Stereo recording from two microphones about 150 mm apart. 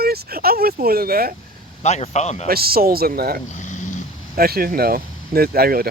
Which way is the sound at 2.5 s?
90° right.